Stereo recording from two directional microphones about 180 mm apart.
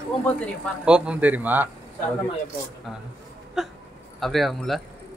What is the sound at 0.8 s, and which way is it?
Speech, 5° right (ahead or behind).